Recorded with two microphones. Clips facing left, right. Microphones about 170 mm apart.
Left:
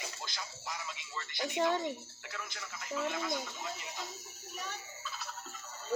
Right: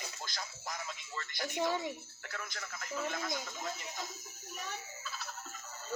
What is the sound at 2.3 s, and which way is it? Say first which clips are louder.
Speech: right 1 dB; 45° right (ahead or behind).